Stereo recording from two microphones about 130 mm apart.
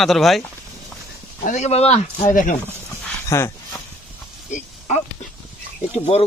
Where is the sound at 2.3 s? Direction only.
90° left.